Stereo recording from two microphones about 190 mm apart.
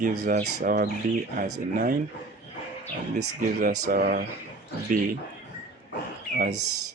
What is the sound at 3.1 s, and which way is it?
Speech, 45° right (ahead or behind).